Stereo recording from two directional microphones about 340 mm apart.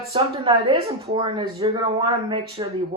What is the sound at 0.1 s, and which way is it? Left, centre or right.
Speech, centre.